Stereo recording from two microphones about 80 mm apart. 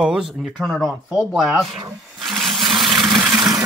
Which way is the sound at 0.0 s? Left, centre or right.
Centre.